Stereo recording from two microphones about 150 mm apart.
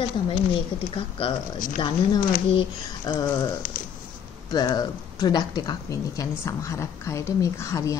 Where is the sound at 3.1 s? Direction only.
25° left (ahead or behind).